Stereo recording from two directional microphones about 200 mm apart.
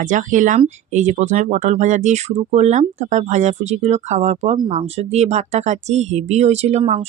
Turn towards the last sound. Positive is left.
turn(degrees=-30)  # may be behind; listen again after turning